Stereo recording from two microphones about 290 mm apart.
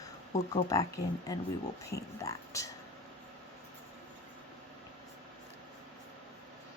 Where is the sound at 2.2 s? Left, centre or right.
Centre.